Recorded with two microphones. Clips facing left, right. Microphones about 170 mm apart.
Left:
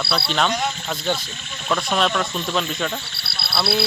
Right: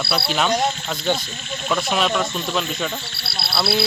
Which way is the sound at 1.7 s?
5° right (ahead or behind).